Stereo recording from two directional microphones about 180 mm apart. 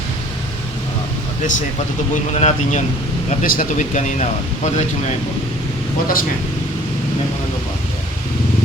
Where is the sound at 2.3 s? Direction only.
35° left (ahead or behind).